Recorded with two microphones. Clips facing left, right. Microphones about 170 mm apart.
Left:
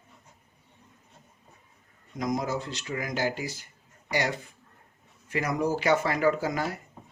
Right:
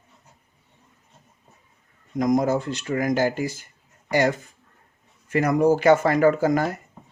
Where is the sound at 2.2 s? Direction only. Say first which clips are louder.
Right 9 dB; 50° right (ahead or behind).